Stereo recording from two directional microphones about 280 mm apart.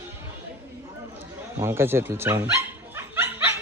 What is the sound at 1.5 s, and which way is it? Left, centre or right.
Dog, centre.